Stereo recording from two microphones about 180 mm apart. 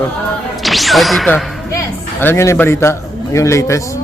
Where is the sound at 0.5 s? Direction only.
Centre (ahead or behind).